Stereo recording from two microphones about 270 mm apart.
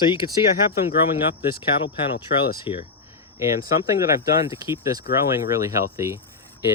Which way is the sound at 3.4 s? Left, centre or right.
Centre.